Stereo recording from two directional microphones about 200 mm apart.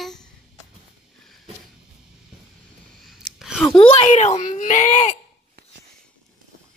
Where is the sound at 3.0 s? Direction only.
Centre (ahead or behind).